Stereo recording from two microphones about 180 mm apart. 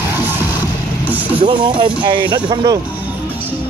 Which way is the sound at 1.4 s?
25° right (ahead or behind).